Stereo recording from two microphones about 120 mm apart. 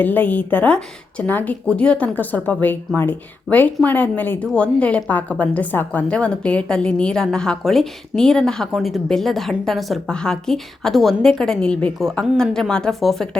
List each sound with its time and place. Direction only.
0.0 s a woman's voice: 15° left (ahead or behind)